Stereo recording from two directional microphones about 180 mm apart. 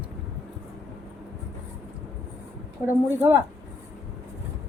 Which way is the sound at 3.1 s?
10° right (ahead or behind).